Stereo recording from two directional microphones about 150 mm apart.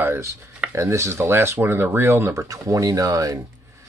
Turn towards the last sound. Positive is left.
turn(degrees=-25)  # may be behind; listen again after turning